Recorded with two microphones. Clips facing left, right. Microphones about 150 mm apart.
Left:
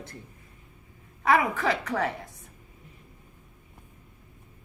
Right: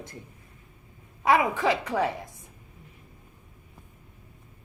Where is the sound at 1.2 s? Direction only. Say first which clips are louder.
Right 1 dB; 15° right (ahead or behind).